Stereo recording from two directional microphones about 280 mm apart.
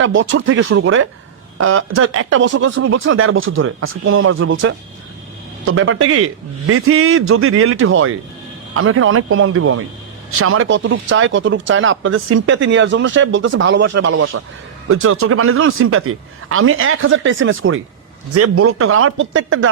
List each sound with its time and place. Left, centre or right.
0.0 s speech: right